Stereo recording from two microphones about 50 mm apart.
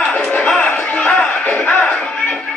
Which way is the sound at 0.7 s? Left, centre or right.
Left.